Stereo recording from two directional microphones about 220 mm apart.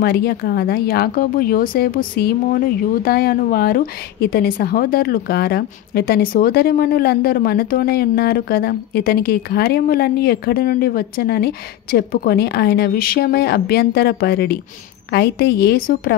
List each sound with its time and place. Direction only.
0.0 s speech: 45° left (ahead or behind)